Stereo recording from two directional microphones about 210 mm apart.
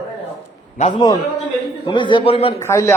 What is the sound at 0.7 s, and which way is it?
A man's voice, 30° left (ahead or behind).